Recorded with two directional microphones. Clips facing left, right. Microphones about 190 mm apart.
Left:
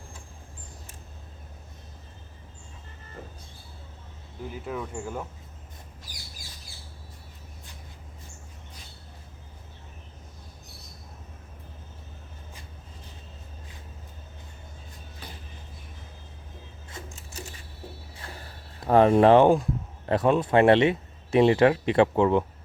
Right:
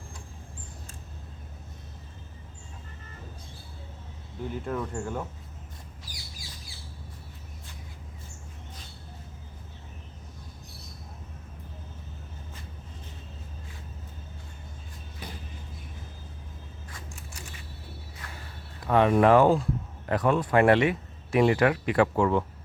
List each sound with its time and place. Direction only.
4.5 s speech: 5° left (ahead or behind)
18.2 s a sound: 30° left (ahead or behind)
20.1 s speech: 25° left (ahead or behind)